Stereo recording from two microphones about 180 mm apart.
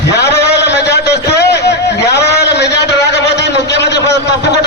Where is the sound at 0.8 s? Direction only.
70° left (ahead or behind).